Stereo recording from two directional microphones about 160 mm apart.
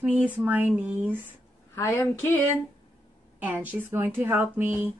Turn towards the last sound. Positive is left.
turn(degrees=-10)  # may be behind; listen again after turning